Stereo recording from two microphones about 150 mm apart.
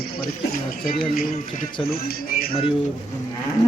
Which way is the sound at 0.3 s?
70° left (ahead or behind).